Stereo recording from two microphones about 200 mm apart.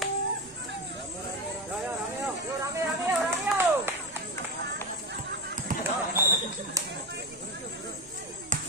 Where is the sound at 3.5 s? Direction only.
10° right (ahead or behind).